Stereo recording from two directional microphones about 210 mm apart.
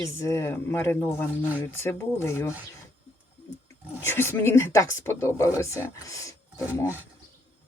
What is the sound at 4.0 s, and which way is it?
Speech, 10° left (ahead or behind).